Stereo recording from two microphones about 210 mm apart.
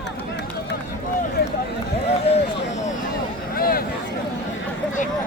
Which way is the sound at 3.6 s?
45° left (ahead or behind).